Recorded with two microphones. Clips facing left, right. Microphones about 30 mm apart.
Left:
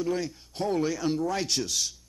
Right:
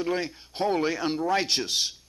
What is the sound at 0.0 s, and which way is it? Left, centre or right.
A man's voice, right.